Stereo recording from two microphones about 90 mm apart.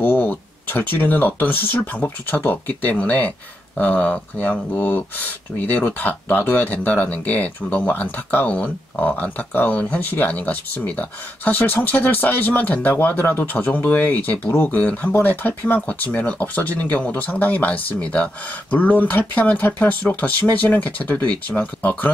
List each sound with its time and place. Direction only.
0.0 s speech: 20° left (ahead or behind)